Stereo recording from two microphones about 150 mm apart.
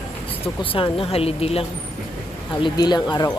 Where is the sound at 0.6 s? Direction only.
35° left (ahead or behind).